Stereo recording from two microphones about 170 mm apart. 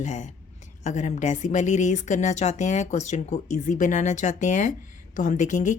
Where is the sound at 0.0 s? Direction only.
45° left (ahead or behind).